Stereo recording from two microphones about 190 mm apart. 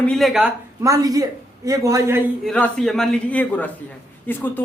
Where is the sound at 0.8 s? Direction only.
15° right (ahead or behind).